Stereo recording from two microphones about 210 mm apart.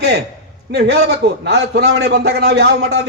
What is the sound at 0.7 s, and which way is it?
A man's voice, 55° right (ahead or behind).